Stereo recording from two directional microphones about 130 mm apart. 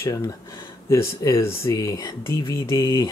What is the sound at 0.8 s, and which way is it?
Speech, 20° left (ahead or behind).